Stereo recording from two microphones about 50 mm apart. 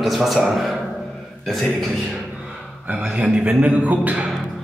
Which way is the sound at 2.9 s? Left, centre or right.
Centre.